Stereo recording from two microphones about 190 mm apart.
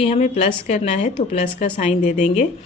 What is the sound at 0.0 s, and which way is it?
A woman's voice, 35° left (ahead or behind).